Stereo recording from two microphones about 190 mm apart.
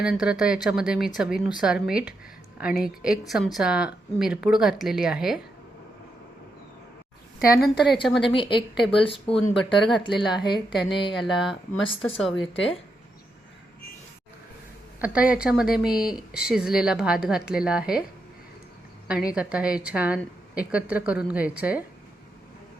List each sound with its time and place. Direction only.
0.0 s a woman's voice: 5° right (ahead or behind)
7.3 s a woman's voice: 55° left (ahead or behind)
8.2 s speech: 25° left (ahead or behind)
11.3 s a woman's voice: centre (ahead or behind)
12.5 s speech: 30° left (ahead or behind)
15.0 s a woman's voice: 5° right (ahead or behind)
19.0 s a woman's voice: 5° right (ahead or behind)